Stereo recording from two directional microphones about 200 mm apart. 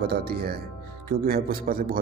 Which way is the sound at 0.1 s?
50° right (ahead or behind).